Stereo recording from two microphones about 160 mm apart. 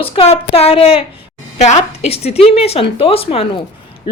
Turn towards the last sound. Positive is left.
turn(degrees=30)  # may be behind; listen again after turning